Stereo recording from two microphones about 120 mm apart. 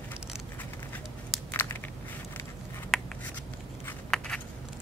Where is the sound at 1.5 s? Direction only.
15° left (ahead or behind).